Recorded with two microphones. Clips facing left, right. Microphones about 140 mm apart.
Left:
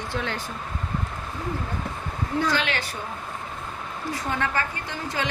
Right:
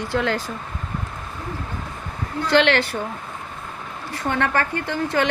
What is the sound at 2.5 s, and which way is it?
Speech, 70° right (ahead or behind).